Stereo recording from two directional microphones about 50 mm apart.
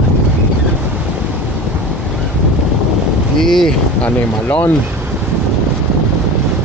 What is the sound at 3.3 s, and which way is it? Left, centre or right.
Boat, centre.